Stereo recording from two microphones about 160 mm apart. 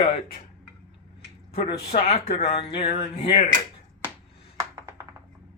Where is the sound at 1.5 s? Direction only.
40° left (ahead or behind).